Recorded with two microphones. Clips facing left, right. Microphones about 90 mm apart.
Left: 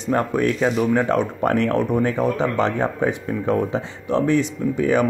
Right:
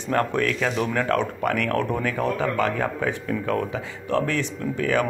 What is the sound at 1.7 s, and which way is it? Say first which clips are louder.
Speech: left 4 dB; 15° left (ahead or behind).